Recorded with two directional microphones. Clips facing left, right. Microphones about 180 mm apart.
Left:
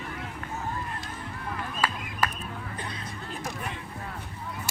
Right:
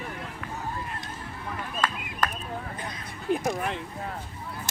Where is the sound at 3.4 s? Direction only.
65° right (ahead or behind).